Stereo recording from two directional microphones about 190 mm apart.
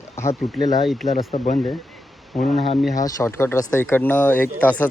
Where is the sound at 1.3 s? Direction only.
40° left (ahead or behind).